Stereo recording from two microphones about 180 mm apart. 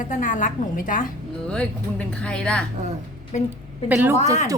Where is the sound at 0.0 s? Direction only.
45° left (ahead or behind).